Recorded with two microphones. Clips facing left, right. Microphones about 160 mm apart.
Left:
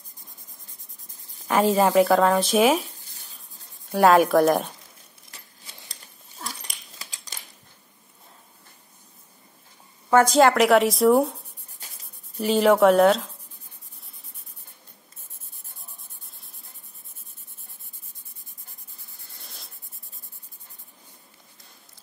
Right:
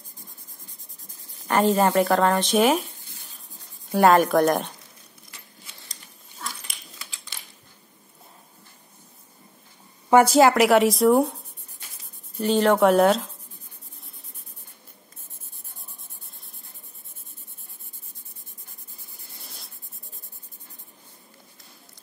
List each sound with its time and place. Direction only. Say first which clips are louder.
1.4 s speech: even; centre (ahead or behind)
3.9 s speech: even; centre (ahead or behind)
7.0 s a sound: left 1 dB; 40° left (ahead or behind)
10.1 s speech: right 1 dB; 5° right (ahead or behind)
12.4 s speech: left 1 dB; 5° left (ahead or behind)
19.4 s writing: even; centre (ahead or behind)